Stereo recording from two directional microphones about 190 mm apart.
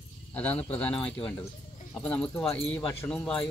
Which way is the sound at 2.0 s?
5° left (ahead or behind).